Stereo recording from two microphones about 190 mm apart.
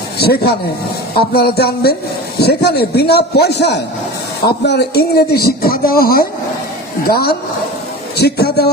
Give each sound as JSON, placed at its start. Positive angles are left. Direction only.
{"t": 0.2, "sound": "a man's voice", "side_deg": 55}